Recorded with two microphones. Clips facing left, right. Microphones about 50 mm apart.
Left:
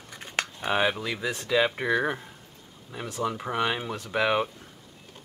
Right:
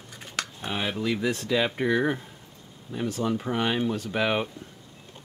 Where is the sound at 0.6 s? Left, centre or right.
Left.